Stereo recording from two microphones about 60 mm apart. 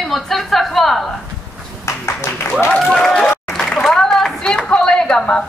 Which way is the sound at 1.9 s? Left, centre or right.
Left.